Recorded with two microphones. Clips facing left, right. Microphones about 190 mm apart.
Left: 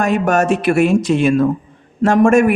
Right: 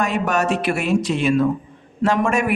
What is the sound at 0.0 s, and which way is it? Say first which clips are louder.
A man's voice: left 5 dB; 45° left (ahead or behind).